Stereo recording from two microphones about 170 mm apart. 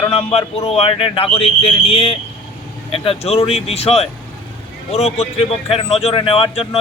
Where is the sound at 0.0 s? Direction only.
35° left (ahead or behind).